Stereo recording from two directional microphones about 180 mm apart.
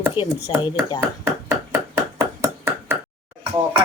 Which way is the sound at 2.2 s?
15° right (ahead or behind).